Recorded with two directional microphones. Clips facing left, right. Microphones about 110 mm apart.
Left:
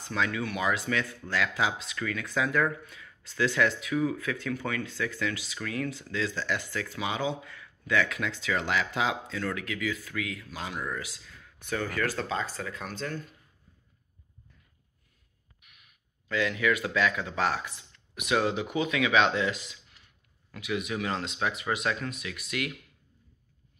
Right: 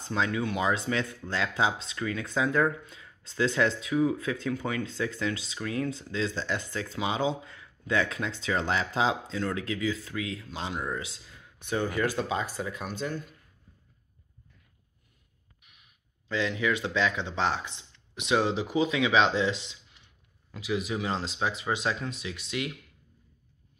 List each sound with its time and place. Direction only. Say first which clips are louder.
0.0 s speech: right 1 dB; 25° right (ahead or behind)
16.3 s speech: left 1 dB; 25° right (ahead or behind)